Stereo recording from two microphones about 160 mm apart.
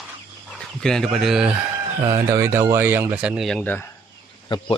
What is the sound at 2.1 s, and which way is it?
Speech, 20° right (ahead or behind).